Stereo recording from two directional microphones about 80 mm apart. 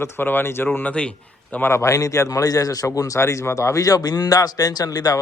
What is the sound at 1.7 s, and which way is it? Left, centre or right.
Speech, left.